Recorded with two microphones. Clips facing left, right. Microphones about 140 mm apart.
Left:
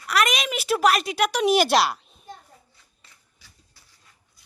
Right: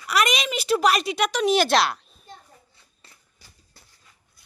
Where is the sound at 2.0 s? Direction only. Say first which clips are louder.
Left 4 dB; 15° left (ahead or behind).